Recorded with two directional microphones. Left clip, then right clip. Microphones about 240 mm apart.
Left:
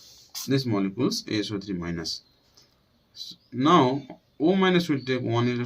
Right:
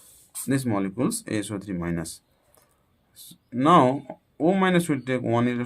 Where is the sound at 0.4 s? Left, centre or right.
Right.